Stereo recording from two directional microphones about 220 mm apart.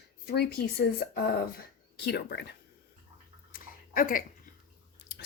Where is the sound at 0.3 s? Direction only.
45° left (ahead or behind).